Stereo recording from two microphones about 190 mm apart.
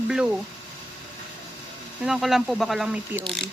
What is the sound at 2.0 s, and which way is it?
Speech, centre (ahead or behind).